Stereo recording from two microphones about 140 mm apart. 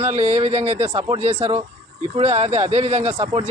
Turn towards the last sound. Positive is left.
turn(degrees=-50)  # may be behind; listen again after turning